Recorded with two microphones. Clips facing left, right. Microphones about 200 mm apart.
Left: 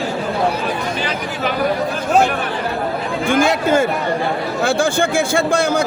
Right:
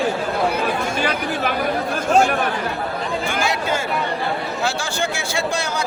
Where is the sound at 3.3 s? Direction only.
50° left (ahead or behind).